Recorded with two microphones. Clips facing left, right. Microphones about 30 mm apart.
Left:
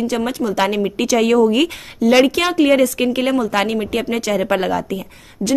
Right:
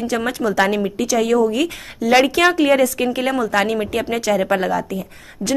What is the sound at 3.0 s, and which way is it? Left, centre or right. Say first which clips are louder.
Speech: left 2 dB; left.